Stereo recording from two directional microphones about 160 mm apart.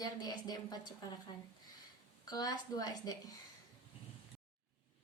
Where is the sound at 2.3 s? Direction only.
25° left (ahead or behind).